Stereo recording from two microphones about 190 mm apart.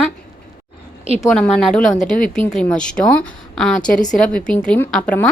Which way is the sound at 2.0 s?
45° left (ahead or behind).